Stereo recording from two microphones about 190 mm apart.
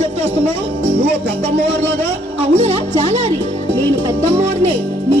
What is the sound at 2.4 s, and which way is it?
Speech, 35° right (ahead or behind).